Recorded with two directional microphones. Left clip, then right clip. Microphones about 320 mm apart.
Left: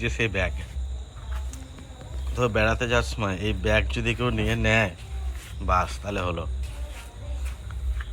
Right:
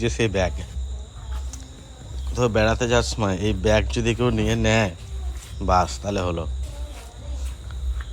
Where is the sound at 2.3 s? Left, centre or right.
Centre.